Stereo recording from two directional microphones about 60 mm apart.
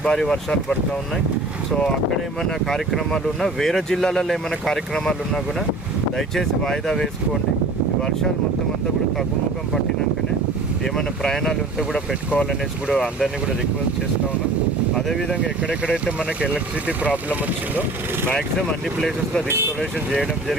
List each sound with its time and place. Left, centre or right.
0.0 s speech: centre
2.4 s speech: centre
10.9 s speech: centre
12.9 s speech: centre
14.9 s speech: centre
17.0 s speech: right
18.3 s speech: centre